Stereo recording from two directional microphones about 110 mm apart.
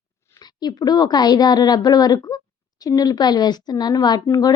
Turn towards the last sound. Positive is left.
turn(degrees=35)  # may be behind; listen again after turning